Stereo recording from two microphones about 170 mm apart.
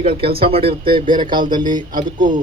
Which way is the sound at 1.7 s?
50° right (ahead or behind).